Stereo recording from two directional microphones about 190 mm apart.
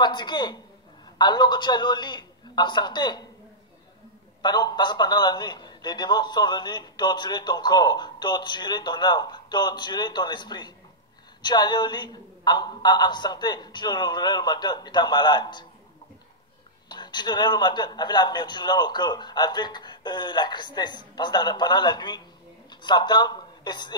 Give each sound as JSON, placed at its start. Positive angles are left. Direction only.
{"t": 0.0, "sound": "a man's voice", "side_deg": 25}
{"t": 4.4, "sound": "a man's voice", "side_deg": 20}
{"t": 16.9, "sound": "a man's voice", "side_deg": 25}